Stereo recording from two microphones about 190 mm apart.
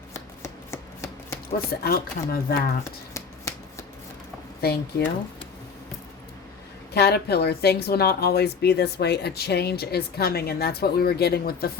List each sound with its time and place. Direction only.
0.1 s chopping: 15° left (ahead or behind)
1.5 s speech: 50° left (ahead or behind)
2.8 s shuffling cards: 15° left (ahead or behind)
4.6 s speech: 55° left (ahead or behind)
6.9 s speech: 60° left (ahead or behind)